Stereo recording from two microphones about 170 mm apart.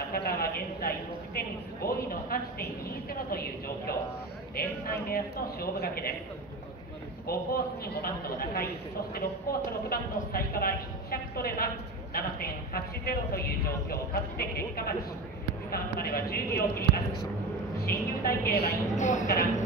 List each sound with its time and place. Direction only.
0.1 s a man's voice: 60° left (ahead or behind)
7.2 s a man's voice: 65° left (ahead or behind)
17.7 s a man's voice: 60° left (ahead or behind)
18.9 s speech: 45° left (ahead or behind)